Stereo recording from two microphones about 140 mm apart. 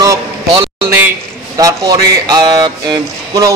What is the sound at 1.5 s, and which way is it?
Speech, 25° right (ahead or behind).